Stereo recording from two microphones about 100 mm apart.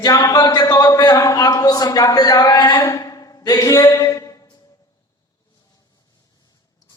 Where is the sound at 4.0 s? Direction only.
35° left (ahead or behind).